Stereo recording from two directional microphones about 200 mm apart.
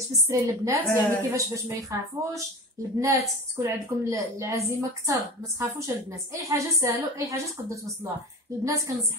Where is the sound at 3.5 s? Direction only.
15° right (ahead or behind).